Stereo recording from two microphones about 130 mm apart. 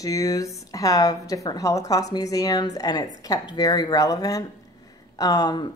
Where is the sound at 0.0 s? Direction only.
25° left (ahead or behind).